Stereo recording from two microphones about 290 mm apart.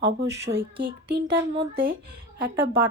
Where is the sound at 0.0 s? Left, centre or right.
Right.